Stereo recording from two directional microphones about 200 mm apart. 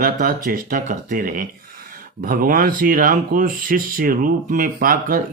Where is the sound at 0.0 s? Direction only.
45° right (ahead or behind).